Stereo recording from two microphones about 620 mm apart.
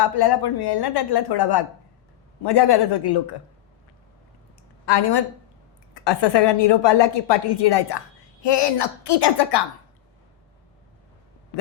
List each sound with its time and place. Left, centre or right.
0.0 s speech: left
4.9 s a woman's voice: left